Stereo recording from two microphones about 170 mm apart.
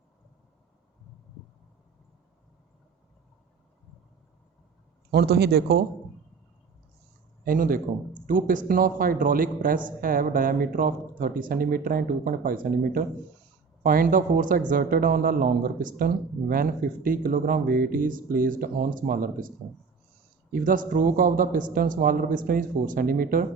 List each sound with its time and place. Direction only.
5.1 s a man's voice: 70° right (ahead or behind)
7.4 s speech: 55° right (ahead or behind)